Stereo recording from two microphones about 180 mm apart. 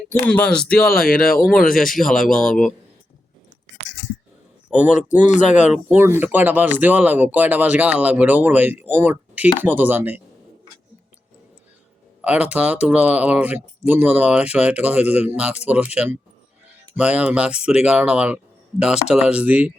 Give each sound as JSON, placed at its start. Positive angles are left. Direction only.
{"t": 0.1, "sound": "speech", "side_deg": 10}
{"t": 0.8, "sound": "speech", "side_deg": 55}
{"t": 1.4, "sound": "speech", "side_deg": 0}
{"t": 1.6, "sound": "speech", "side_deg": 50}
{"t": 4.7, "sound": "speech", "side_deg": -5}
{"t": 5.2, "sound": "speech", "side_deg": 40}
{"t": 5.9, "sound": "speech", "side_deg": -10}
{"t": 12.2, "sound": "speech", "side_deg": -10}
{"t": 16.9, "sound": "speech", "side_deg": -5}